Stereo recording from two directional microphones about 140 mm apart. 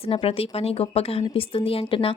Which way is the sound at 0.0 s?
40° left (ahead or behind).